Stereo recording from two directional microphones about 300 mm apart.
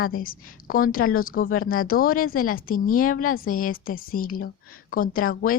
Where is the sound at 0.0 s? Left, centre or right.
Left.